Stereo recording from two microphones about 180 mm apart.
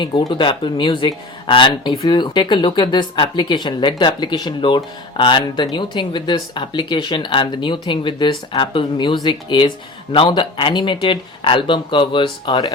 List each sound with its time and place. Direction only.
0.0 s speech: 25° left (ahead or behind)